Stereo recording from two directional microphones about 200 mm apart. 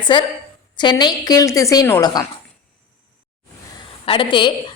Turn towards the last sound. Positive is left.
turn(degrees=25)  # may be behind; listen again after turning